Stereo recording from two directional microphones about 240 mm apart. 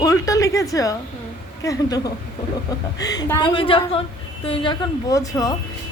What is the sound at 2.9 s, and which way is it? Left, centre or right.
A woman's voice, centre.